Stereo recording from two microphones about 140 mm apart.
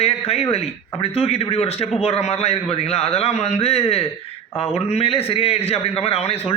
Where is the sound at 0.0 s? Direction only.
45° left (ahead or behind).